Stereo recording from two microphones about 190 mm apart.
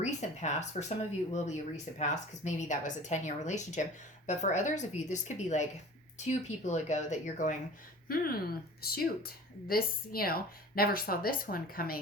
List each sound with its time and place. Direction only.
0.0 s speech: 40° left (ahead or behind)